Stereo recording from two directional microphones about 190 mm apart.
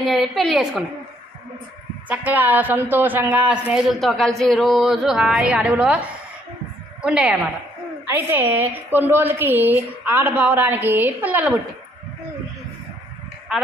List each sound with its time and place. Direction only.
0.0 s speech: centre (ahead or behind)
2.0 s a woman's voice: 10° right (ahead or behind)
13.5 s sheep: 5° right (ahead or behind)